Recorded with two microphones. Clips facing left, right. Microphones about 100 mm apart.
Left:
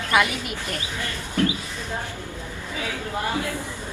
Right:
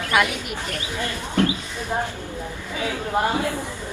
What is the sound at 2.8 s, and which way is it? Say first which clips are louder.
Speech: right 6 dB; 20° right (ahead or behind).